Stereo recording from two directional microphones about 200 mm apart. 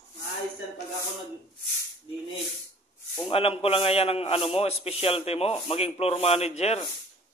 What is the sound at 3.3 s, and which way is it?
A man's voice, 30° left (ahead or behind).